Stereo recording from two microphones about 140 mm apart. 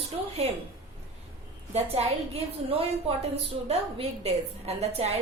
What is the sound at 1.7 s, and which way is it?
Speech, 45° right (ahead or behind).